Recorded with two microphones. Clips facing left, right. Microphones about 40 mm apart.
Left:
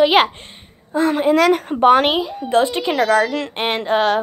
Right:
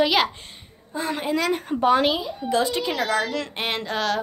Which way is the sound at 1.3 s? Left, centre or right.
Left.